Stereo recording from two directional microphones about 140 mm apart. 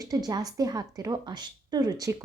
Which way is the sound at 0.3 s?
25° right (ahead or behind).